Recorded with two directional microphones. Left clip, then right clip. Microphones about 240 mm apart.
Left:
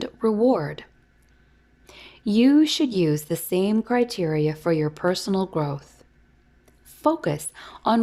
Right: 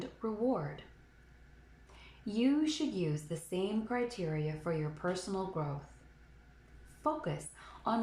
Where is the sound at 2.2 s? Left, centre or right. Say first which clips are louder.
Left 14 dB; left.